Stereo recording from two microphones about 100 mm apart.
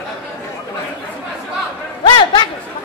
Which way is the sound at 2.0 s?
50° left (ahead or behind).